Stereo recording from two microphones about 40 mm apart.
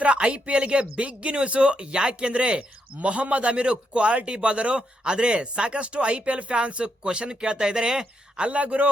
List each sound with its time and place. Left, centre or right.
0.0 s speech: right
8.4 s a man's voice: right